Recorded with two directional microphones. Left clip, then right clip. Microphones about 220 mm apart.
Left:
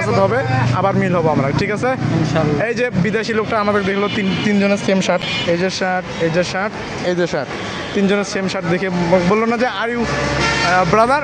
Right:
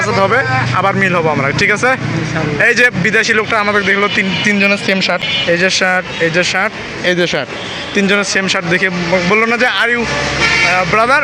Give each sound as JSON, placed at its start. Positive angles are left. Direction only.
{"t": 0.1, "sound": "speech", "side_deg": 0}
{"t": 5.5, "sound": "speech", "side_deg": 0}